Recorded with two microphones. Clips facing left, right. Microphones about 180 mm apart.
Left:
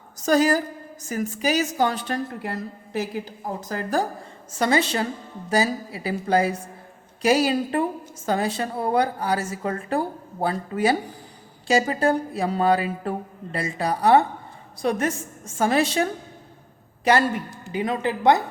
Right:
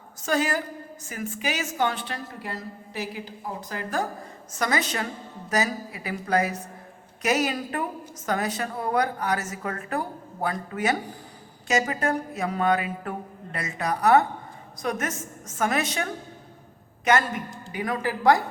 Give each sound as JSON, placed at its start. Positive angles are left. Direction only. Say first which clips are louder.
{"t": 0.2, "sound": "a woman's voice", "louder": "left 6 dB", "side_deg": 40}